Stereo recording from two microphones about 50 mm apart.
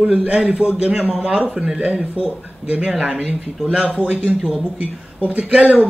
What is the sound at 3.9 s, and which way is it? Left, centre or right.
A man's voice, right.